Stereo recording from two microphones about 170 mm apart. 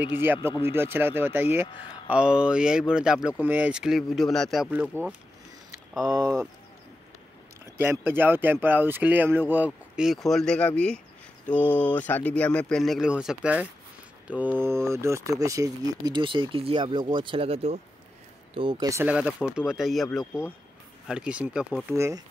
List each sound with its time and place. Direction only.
0.1 s speech: 15° right (ahead or behind)
7.7 s speech: 15° right (ahead or behind); by 18.9 s 30° right (ahead or behind)
18.9 s speech: 10° right (ahead or behind)